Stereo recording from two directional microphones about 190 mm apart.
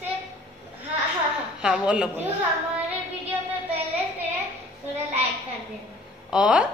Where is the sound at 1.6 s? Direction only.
5° right (ahead or behind).